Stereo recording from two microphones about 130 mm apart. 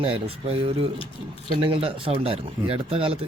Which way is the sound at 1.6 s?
45° right (ahead or behind).